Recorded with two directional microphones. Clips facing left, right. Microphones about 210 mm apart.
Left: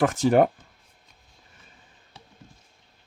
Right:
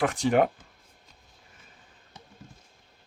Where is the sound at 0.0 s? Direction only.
40° left (ahead or behind).